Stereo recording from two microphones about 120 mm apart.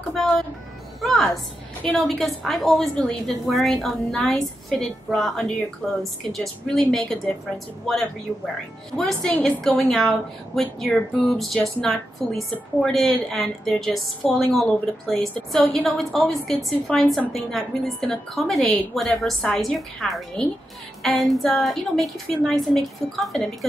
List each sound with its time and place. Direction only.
1.0 s a woman's voice: centre (ahead or behind)